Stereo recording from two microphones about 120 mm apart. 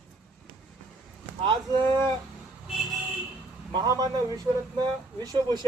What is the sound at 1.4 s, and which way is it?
Speech, 40° right (ahead or behind).